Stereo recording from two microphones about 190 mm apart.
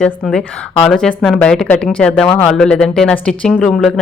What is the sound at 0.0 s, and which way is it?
Speech, 5° left (ahead or behind).